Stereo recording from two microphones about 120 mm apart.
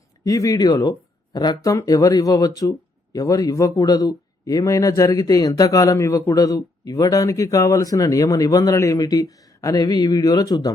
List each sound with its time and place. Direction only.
0.3 s speech: 30° left (ahead or behind)